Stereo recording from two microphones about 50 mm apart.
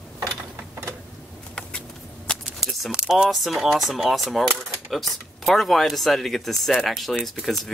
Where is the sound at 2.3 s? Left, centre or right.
Centre.